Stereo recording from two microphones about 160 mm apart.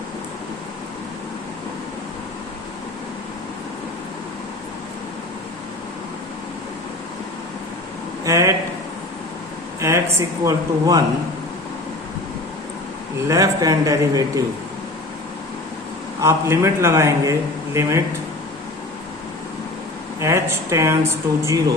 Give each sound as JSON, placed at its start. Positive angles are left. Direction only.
{"t": 8.2, "sound": "speech", "side_deg": -20}
{"t": 9.8, "sound": "speech", "side_deg": -20}
{"t": 13.2, "sound": "speech", "side_deg": -20}
{"t": 16.2, "sound": "speech", "side_deg": -20}
{"t": 20.1, "sound": "speech", "side_deg": -20}